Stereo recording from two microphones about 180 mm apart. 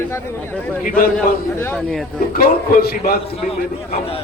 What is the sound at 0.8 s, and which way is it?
Speech, 50° left (ahead or behind).